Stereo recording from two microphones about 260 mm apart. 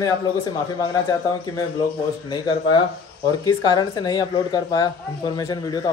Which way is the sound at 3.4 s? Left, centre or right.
Centre.